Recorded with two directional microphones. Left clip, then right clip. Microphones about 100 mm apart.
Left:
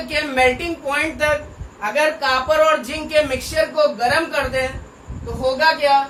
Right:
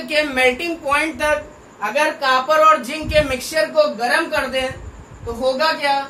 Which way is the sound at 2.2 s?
20° right (ahead or behind).